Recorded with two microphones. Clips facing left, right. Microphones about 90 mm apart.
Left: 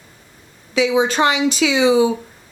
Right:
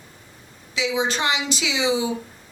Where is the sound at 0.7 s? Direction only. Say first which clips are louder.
Left 7 dB; 50° left (ahead or behind).